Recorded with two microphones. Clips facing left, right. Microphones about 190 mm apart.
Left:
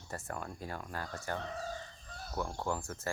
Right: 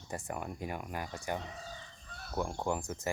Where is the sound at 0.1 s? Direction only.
15° right (ahead or behind).